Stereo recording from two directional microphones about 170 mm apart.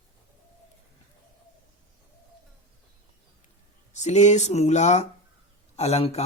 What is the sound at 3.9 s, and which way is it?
Speech, 40° left (ahead or behind).